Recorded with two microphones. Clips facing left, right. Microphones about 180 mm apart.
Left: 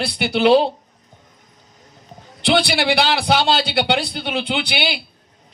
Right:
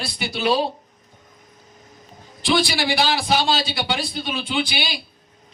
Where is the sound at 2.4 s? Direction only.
65° left (ahead or behind).